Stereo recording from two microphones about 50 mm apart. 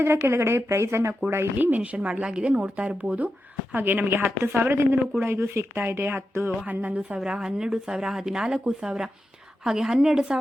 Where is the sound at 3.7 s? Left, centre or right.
Right.